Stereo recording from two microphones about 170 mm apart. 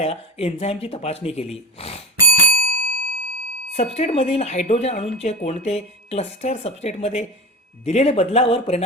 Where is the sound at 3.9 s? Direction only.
40° left (ahead or behind).